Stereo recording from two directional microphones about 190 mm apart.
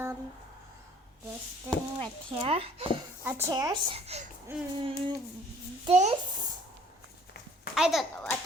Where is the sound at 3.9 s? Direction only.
35° right (ahead or behind).